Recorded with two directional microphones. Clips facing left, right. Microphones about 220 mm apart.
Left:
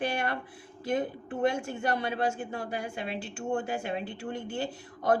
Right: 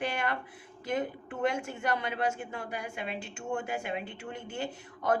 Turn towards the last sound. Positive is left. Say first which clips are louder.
# left 3 dB
turn(degrees=35)  # may be behind; listen again after turning